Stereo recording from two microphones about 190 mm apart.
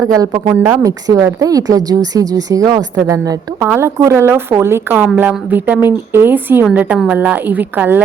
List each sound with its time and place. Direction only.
0.0 s a woman's voice: 20° right (ahead or behind)